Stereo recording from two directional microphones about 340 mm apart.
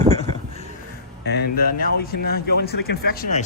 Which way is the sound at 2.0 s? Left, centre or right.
Left.